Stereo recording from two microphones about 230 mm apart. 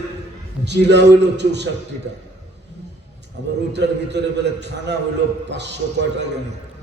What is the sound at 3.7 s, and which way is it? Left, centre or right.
A man's voice, right.